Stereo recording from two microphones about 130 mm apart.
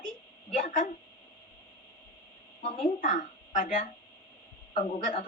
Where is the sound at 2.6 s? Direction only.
60° left (ahead or behind).